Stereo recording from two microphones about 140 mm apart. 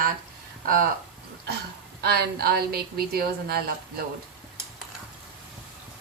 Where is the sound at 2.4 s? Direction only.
90° right.